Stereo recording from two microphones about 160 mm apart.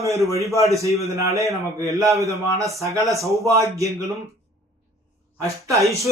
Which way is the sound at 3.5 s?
20° right (ahead or behind).